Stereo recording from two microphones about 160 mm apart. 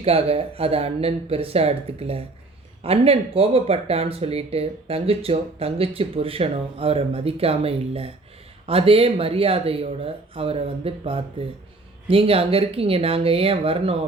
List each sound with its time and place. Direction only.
0.0 s speech: 35° right (ahead or behind)